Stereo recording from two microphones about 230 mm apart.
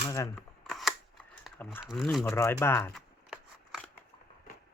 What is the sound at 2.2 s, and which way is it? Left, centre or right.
Speech, centre.